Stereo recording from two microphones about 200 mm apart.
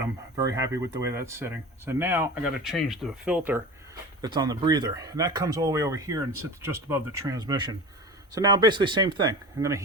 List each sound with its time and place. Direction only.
0.3 s speech: 15° right (ahead or behind)
4.2 s speech: 20° right (ahead or behind)